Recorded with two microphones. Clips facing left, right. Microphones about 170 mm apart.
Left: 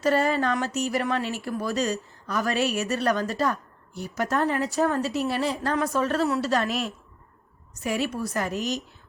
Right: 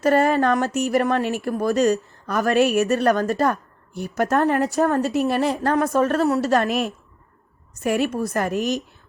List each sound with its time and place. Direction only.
0.0 s speech: 55° right (ahead or behind)